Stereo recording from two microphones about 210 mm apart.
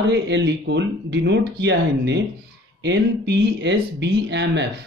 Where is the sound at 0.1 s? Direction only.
55° right (ahead or behind).